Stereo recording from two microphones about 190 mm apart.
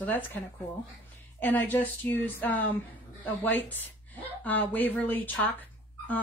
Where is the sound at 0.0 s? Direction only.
10° left (ahead or behind).